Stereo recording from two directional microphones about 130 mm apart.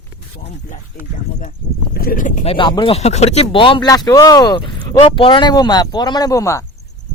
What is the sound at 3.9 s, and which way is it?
Speech, 30° left (ahead or behind).